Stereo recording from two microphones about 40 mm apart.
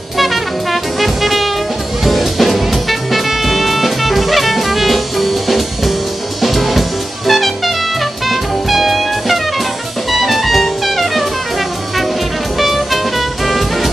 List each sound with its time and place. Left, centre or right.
0.2 s brass instrument: centre
2.0 s music: centre
12.5 s music: centre